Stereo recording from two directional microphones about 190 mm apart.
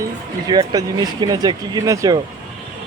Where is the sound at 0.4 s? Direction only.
20° right (ahead or behind).